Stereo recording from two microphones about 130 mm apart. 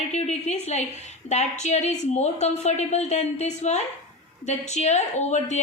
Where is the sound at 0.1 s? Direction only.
60° left (ahead or behind).